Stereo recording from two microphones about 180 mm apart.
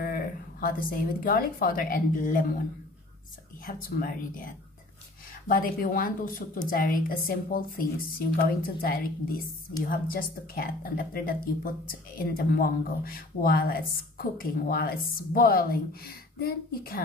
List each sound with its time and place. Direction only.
0.0 s speech: 55° left (ahead or behind)
3.6 s a woman's voice: 50° left (ahead or behind)